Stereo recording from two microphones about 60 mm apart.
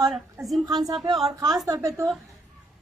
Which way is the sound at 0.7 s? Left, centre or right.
Right.